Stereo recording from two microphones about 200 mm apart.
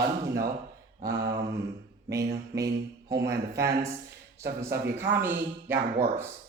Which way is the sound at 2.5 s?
15° right (ahead or behind).